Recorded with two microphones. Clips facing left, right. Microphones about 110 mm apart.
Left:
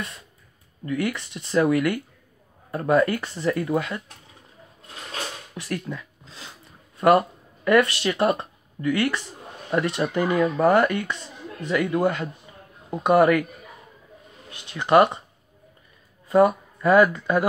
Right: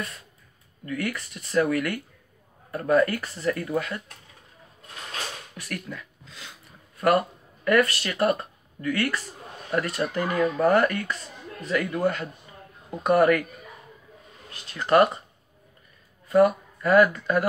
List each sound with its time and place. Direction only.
0.8 s speech: 25° left (ahead or behind)
5.5 s a sound: 30° left (ahead or behind)
7.0 s speech: 25° left (ahead or behind)
14.5 s speech: 25° left (ahead or behind)
16.3 s speech: 25° left (ahead or behind)